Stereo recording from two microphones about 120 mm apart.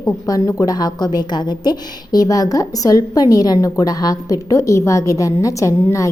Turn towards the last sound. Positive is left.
turn(degrees=25)  # may be behind; listen again after turning